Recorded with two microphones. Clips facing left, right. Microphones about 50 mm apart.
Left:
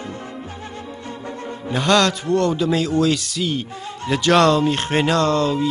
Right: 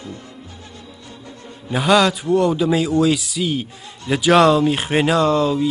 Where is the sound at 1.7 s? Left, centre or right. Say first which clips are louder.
Right 2 dB; centre.